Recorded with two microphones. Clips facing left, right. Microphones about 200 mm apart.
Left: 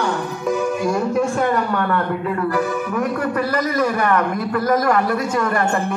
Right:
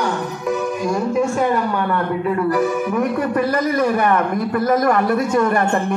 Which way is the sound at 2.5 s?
15° right (ahead or behind).